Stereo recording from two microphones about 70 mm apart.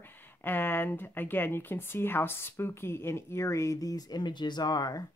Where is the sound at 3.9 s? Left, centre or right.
Left.